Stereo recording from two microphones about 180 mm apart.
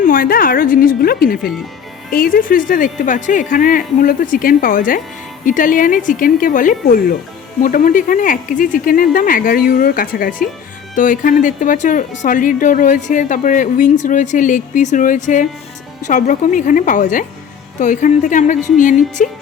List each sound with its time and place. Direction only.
0.0 s a woman's voice: 50° left (ahead or behind)